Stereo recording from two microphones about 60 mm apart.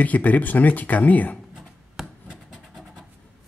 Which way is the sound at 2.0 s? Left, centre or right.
Centre.